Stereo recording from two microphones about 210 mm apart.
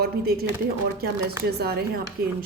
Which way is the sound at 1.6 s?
45° right (ahead or behind).